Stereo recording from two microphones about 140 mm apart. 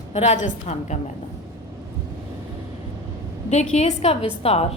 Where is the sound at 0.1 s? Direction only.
50° left (ahead or behind).